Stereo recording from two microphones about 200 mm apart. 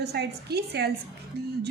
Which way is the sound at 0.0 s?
55° right (ahead or behind).